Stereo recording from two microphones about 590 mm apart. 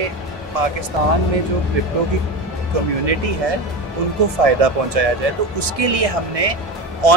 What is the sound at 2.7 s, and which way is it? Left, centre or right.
Speech, right.